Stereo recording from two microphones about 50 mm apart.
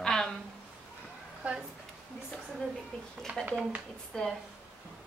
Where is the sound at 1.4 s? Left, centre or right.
Right.